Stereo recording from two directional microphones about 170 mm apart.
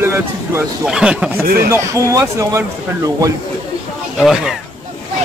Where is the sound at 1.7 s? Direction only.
15° right (ahead or behind).